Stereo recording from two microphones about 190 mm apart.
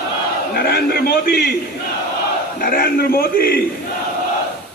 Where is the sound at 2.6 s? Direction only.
50° left (ahead or behind).